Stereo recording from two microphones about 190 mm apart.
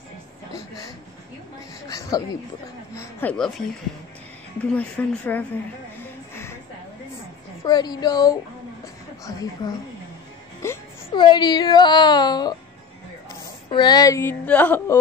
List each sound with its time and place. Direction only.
1.9 s speech: 20° left (ahead or behind)
7.6 s a woman's voice: 20° left (ahead or behind)
11.1 s speech: 25° left (ahead or behind)
13.7 s speech: 20° left (ahead or behind)